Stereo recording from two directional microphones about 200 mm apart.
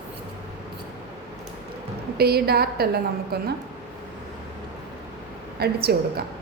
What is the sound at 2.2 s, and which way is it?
A woman's voice, 50° right (ahead or behind).